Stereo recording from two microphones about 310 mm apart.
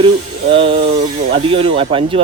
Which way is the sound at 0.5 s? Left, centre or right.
Centre.